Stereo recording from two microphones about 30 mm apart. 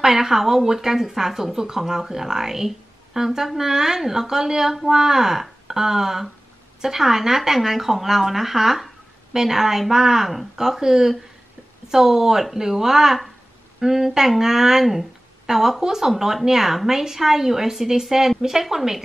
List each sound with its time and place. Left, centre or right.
0.0 s speech: centre